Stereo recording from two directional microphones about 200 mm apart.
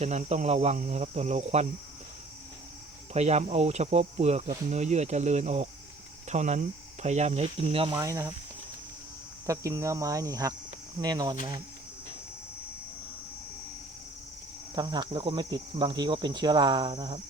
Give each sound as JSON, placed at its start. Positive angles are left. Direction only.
{"t": 0.0, "sound": "speech", "side_deg": -35}
{"t": 3.1, "sound": "speech", "side_deg": -35}
{"t": 9.5, "sound": "speech", "side_deg": -15}
{"t": 14.8, "sound": "speech", "side_deg": -20}